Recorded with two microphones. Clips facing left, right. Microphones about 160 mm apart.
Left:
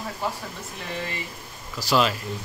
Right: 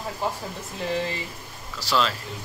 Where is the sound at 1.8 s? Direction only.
15° left (ahead or behind).